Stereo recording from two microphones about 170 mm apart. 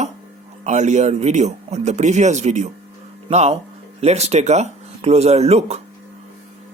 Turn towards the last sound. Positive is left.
turn(degrees=-40)  # may be behind; listen again after turning